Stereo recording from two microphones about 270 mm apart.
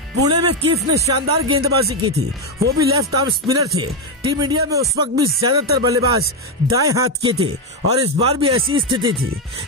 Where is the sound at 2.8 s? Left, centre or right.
Centre.